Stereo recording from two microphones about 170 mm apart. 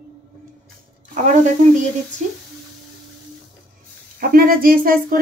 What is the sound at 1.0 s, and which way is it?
Speech, 45° right (ahead or behind).